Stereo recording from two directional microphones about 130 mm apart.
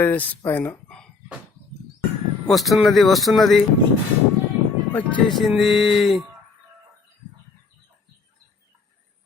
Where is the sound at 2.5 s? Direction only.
Centre (ahead or behind).